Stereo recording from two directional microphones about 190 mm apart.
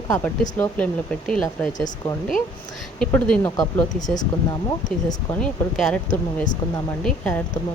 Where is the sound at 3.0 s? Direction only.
5° left (ahead or behind).